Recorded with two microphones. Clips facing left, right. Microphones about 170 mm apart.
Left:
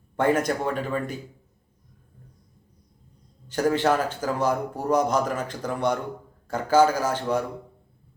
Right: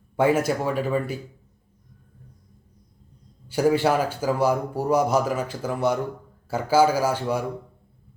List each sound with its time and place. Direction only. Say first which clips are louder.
0.2 s a man's voice: right 2 dB; 5° right (ahead or behind)
3.5 s a man's voice: right 2 dB; 10° right (ahead or behind)